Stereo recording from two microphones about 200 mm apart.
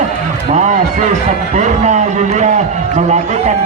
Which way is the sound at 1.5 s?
35° right (ahead or behind).